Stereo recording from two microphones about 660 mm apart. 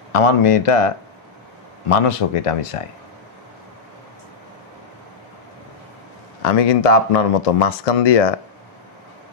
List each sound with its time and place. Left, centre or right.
0.1 s speech: left
6.5 s speech: left